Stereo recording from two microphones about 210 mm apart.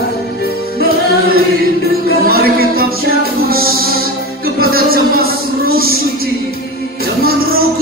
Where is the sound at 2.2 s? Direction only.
45° right (ahead or behind).